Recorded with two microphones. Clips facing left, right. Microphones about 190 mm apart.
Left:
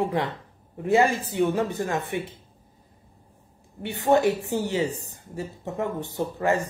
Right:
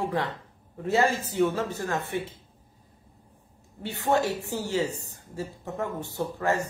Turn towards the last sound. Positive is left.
turn(degrees=15)  # may be behind; listen again after turning